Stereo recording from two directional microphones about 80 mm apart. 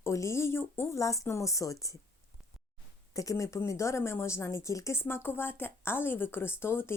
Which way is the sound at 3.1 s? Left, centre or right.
Left.